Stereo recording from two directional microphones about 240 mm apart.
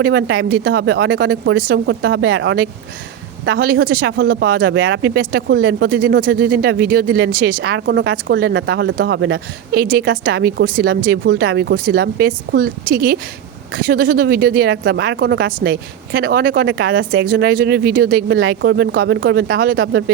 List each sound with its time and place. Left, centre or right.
0.0 s speech: right